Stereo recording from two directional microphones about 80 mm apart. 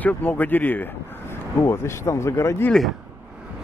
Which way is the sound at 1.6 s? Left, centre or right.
Left.